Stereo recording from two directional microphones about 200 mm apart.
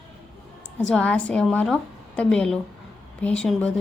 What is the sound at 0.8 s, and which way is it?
Speech, 5° left (ahead or behind).